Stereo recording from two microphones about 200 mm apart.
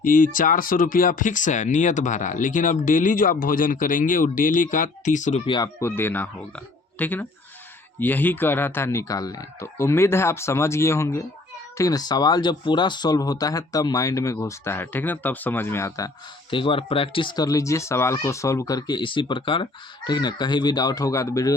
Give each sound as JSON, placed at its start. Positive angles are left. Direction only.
{"t": 0.0, "sound": "speech", "side_deg": 40}
{"t": 5.5, "sound": "speech", "side_deg": 20}